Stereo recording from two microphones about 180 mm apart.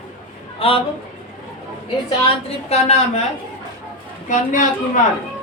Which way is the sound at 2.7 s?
35° left (ahead or behind).